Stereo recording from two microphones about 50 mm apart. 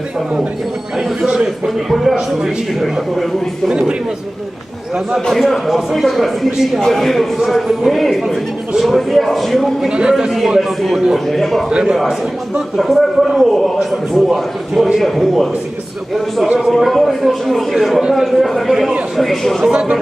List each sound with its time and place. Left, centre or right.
0.9 s a man's voice: centre
3.7 s a man's voice: centre
5.3 s speech: centre
9.9 s a man's voice: centre
11.7 s a man's voice: centre
12.8 s speech: centre
13.7 s a man's voice: centre
16.6 s a man's voice: centre
19.7 s a man's voice: centre